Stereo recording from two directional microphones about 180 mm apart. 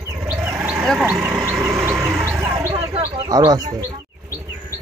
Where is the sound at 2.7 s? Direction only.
30° right (ahead or behind).